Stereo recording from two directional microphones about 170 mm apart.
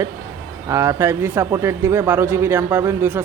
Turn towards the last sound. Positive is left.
turn(degrees=-10)  # may be behind; listen again after turning